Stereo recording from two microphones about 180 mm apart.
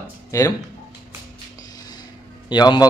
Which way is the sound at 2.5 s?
25° left (ahead or behind).